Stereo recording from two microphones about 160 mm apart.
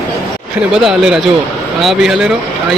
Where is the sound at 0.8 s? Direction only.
5° right (ahead or behind).